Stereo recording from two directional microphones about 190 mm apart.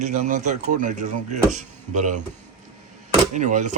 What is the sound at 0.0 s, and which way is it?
Speech, 40° right (ahead or behind).